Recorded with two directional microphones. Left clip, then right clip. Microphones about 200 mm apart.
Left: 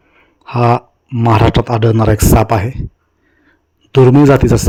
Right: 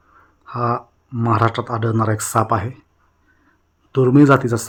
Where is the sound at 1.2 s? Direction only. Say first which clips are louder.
Left 6 dB; 30° left (ahead or behind).